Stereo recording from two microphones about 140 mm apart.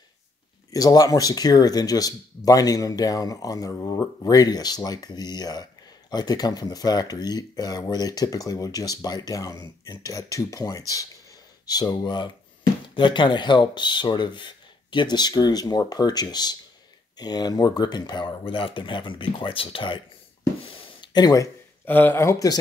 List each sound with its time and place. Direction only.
0.7 s speech: 25° left (ahead or behind)
20.6 s a sound: 40° left (ahead or behind)
21.8 s speech: 15° left (ahead or behind)